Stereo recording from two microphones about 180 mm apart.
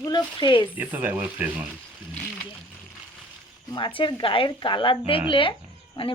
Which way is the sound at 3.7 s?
25° left (ahead or behind).